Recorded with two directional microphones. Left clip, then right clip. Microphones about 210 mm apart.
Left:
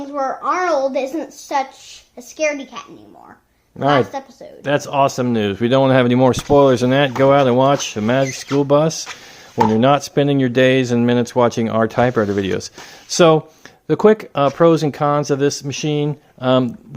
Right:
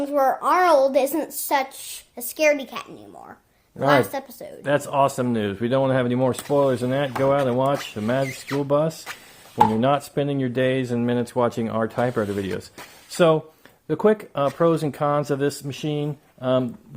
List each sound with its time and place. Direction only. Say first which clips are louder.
0.1 s a child's voice: even; 55° right (ahead or behind)
4.1 s a child's voice: left 2 dB; 45° right (ahead or behind)
4.6 s speech: left 4 dB; 15° left (ahead or behind)